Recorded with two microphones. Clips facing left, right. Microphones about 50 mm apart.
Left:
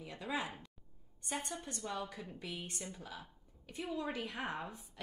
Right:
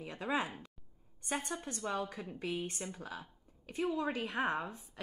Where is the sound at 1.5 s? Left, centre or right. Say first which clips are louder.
Right 4 dB; right.